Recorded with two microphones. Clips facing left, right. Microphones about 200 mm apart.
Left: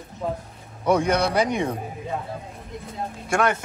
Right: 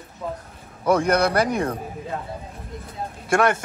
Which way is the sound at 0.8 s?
Centre (ahead or behind).